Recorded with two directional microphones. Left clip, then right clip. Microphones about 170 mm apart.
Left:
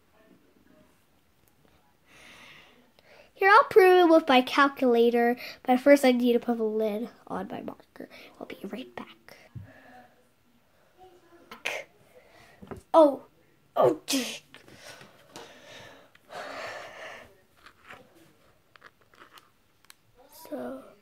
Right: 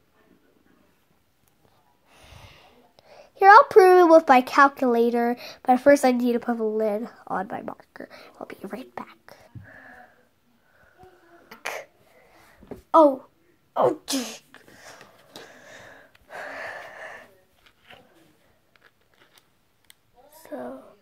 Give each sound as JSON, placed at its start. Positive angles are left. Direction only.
{"t": 2.0, "sound": "a child's voice", "side_deg": -10}
{"t": 9.7, "sound": "wheeze", "side_deg": 0}
{"t": 11.6, "sound": "cough", "side_deg": -10}
{"t": 13.7, "sound": "sneeze", "side_deg": -10}
{"t": 15.3, "sound": "a sound", "side_deg": -5}
{"t": 16.3, "sound": "gasp", "side_deg": 5}
{"t": 17.0, "sound": "wheeze", "side_deg": 15}
{"t": 18.8, "sound": "a sound", "side_deg": 0}